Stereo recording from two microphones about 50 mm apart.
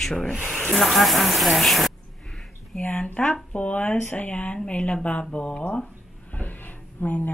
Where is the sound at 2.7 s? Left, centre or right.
Left.